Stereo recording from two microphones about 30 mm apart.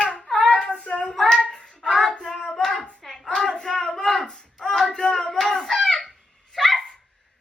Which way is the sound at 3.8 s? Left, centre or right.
Centre.